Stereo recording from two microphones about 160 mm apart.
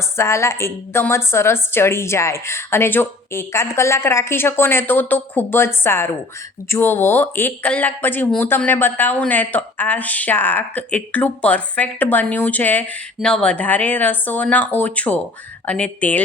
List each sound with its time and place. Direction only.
0.2 s speech: 15° left (ahead or behind)